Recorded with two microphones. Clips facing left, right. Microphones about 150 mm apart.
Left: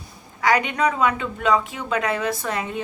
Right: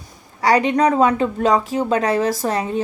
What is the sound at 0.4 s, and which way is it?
Speech, 35° right (ahead or behind).